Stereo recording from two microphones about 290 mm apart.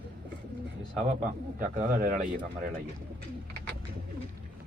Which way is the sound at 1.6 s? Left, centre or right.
Right.